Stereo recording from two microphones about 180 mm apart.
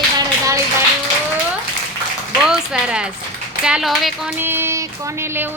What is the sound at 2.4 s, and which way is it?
A woman's voice, 5° right (ahead or behind).